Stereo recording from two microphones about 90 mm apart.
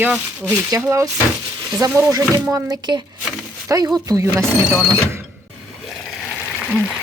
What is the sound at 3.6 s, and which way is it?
Speech, 30° right (ahead or behind).